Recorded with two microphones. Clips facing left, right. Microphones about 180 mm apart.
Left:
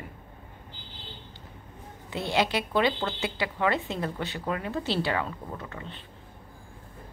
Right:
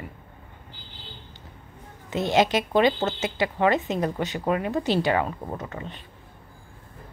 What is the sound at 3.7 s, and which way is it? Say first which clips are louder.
Speech: right 5 dB; 20° right (ahead or behind).